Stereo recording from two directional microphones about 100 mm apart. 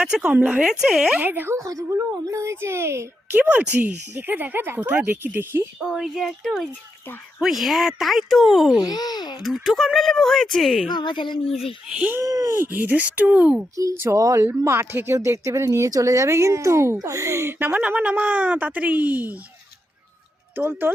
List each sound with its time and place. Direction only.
0.0 s speech: 5° right (ahead or behind)
1.2 s speech: 20° right (ahead or behind)
1.5 s speech: 30° right (ahead or behind)
3.3 s speech: 15° right (ahead or behind)
5.8 s speech: centre (ahead or behind)
8.8 s a child's voice: 40° left (ahead or behind)
9.4 s speech: centre (ahead or behind)
10.9 s a child's voice: 50° left (ahead or behind)
11.9 s speech: 5° right (ahead or behind)
12.2 s speech: 35° right (ahead or behind)
12.5 s speech: 20° right (ahead or behind)
13.7 s speech: 30° right (ahead or behind); by 19.4 s 15° right (ahead or behind)
20.6 s speech: 20° right (ahead or behind)